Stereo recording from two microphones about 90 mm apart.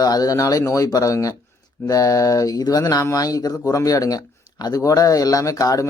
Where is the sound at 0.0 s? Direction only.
45° left (ahead or behind).